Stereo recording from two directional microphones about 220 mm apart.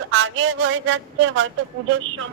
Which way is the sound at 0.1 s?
60° right (ahead or behind).